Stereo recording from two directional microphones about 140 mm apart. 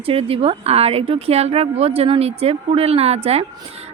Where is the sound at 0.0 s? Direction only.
45° right (ahead or behind).